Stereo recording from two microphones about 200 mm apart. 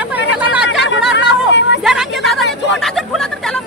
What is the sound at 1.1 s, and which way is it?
Speech, 60° left (ahead or behind).